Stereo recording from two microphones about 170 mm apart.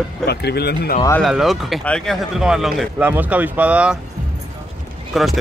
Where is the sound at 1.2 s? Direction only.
Centre (ahead or behind).